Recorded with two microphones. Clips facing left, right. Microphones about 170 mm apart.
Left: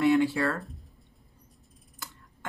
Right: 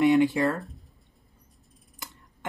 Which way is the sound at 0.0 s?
20° right (ahead or behind).